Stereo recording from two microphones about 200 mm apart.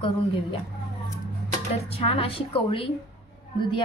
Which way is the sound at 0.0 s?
25° left (ahead or behind).